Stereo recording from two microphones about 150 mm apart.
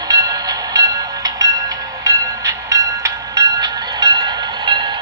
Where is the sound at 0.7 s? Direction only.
25° right (ahead or behind).